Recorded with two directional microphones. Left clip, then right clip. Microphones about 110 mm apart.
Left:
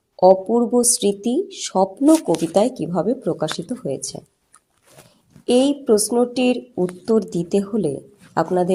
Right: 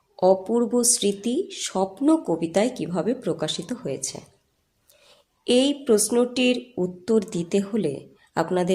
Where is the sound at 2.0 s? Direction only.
20° left (ahead or behind).